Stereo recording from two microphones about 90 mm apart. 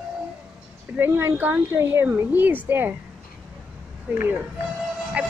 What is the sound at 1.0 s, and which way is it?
A woman's voice, 30° right (ahead or behind).